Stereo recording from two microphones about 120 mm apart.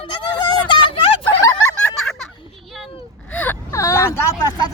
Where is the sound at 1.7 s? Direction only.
5° left (ahead or behind).